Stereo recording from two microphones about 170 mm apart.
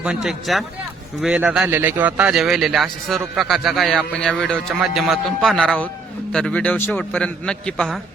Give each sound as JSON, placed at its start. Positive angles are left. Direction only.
{"t": 0.0, "sound": "a man's voice", "side_deg": -5}